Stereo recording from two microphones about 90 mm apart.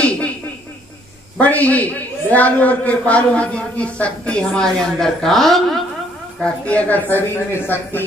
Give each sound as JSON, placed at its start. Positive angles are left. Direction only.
{"t": 1.4, "sound": "a man's voice", "side_deg": 15}
{"t": 6.4, "sound": "speech", "side_deg": 15}